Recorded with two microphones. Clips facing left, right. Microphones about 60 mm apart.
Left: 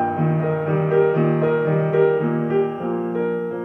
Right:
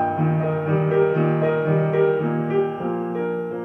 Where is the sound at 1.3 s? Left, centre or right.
Left; by 2.8 s centre.